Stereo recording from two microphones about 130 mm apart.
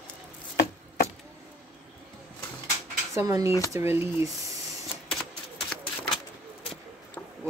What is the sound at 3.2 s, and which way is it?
Speech, 25° right (ahead or behind).